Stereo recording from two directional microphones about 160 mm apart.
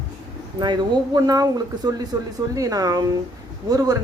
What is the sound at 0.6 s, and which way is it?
A woman's voice, 25° right (ahead or behind).